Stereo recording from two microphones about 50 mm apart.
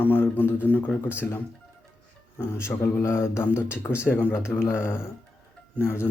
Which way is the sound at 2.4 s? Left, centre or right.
Left.